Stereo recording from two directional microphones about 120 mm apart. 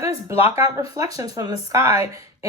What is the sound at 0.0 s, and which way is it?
Speech, 25° right (ahead or behind).